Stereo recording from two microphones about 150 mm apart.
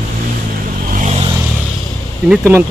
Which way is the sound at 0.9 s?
55° right (ahead or behind).